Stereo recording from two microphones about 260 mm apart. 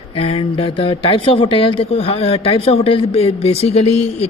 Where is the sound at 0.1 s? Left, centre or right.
Left.